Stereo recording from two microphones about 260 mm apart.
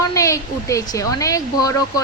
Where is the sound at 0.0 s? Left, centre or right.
Centre.